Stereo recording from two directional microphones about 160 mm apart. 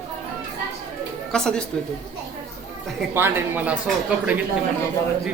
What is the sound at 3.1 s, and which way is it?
Speech, 10° right (ahead or behind).